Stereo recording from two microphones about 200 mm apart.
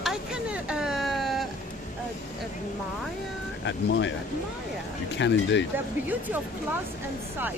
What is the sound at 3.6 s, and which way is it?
Speech, 65° left (ahead or behind).